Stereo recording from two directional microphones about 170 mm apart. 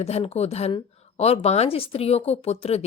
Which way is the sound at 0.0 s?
35° left (ahead or behind).